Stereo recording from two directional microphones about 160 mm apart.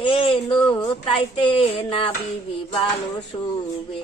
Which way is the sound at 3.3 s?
30° left (ahead or behind).